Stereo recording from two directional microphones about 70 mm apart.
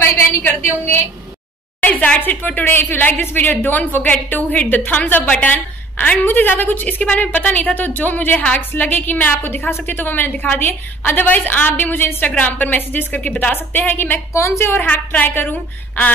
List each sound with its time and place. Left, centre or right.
0.0 s a sound: left
1.8 s speech: left
14.3 s a woman's voice: left
14.9 s speech: left